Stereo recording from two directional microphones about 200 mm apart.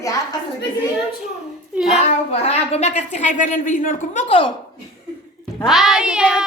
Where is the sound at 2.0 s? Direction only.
30° left (ahead or behind).